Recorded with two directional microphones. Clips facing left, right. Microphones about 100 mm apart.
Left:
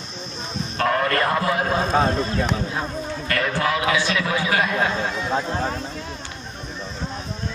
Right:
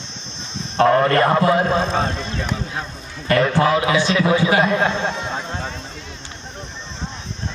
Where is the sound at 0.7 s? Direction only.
30° right (ahead or behind).